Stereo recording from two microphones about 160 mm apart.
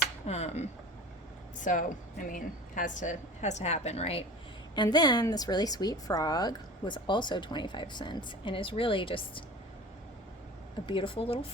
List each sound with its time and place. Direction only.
0.3 s a woman's voice: 40° left (ahead or behind)
4.7 s a woman's voice: 25° left (ahead or behind)
10.8 s speech: 30° left (ahead or behind)